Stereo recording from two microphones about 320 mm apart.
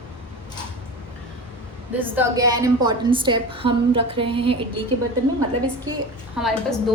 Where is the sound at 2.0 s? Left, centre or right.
Centre.